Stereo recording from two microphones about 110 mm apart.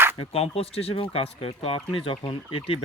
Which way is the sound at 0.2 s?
65° left (ahead or behind).